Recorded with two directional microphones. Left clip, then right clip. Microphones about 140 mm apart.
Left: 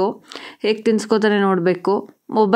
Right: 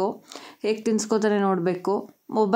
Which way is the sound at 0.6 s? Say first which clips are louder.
Left 6 dB; 25° left (ahead or behind).